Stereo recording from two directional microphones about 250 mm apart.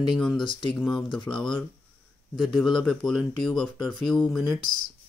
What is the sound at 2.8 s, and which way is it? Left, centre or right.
Speech, centre.